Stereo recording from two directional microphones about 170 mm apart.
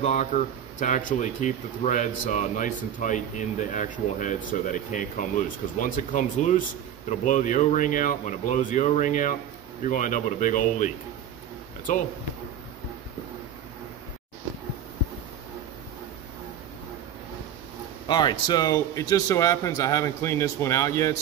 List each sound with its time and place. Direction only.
0.0 s speech: 45° left (ahead or behind)
11.9 s speech: 50° left (ahead or behind)
18.0 s speech: 25° left (ahead or behind)